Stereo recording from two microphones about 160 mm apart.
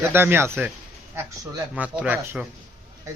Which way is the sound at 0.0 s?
15° right (ahead or behind).